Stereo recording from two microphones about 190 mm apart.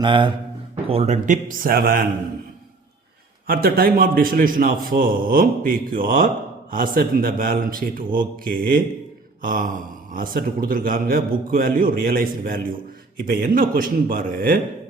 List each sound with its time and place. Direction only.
0.0 s a man's voice: 25° right (ahead or behind); by 2.0 s 50° right (ahead or behind)
3.4 s a man's voice: 50° right (ahead or behind)